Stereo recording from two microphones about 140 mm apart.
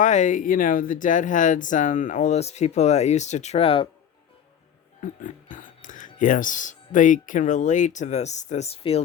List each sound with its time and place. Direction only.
0.0 s speech: 60° left (ahead or behind); by 3.8 s 40° left (ahead or behind)
5.2 s speech: 70° left (ahead or behind); by 9.0 s 45° left (ahead or behind)